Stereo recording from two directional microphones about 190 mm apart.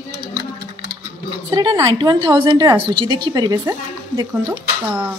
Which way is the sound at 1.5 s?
25° right (ahead or behind).